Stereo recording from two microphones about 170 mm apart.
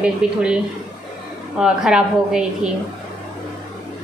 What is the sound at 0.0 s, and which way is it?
Speech, 5° right (ahead or behind).